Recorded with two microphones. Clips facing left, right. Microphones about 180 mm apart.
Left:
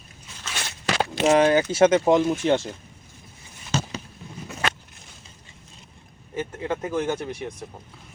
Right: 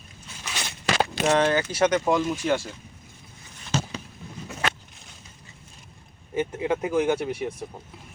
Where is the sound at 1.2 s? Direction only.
15° left (ahead or behind).